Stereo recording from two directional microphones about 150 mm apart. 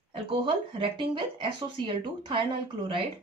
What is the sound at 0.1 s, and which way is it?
Speech, 35° right (ahead or behind).